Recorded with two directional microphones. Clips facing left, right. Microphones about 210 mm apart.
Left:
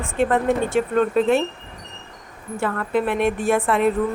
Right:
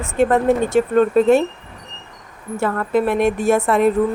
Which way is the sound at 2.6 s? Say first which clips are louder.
Right 4 dB; 40° right (ahead or behind).